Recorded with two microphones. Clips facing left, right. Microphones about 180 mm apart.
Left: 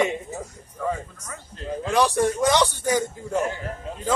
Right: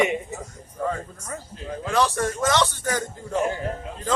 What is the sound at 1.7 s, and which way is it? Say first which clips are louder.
A man's voice: left 1 dB; 15° left (ahead or behind).